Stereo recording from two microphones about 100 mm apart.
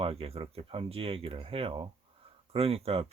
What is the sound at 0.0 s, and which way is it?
Speech, 75° right (ahead or behind).